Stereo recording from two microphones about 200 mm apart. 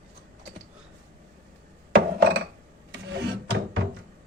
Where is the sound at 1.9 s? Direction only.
55° right (ahead or behind).